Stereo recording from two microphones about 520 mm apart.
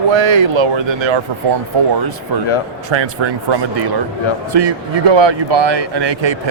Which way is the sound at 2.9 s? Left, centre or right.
Right.